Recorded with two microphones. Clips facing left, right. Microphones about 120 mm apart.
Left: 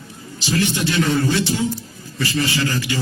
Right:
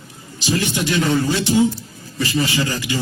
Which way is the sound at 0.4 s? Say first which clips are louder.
Even; 15° right (ahead or behind).